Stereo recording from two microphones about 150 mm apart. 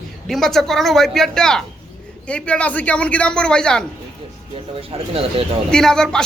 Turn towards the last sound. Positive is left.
turn(degrees=5)  # may be behind; listen again after turning